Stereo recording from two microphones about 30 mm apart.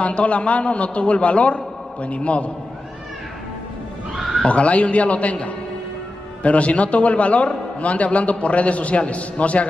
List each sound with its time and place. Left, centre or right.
0.0 s a man's voice: left
4.5 s a man's voice: left